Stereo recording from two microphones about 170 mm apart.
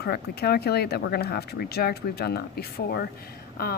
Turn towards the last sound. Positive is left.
turn(degrees=60)  # may be behind; listen again after turning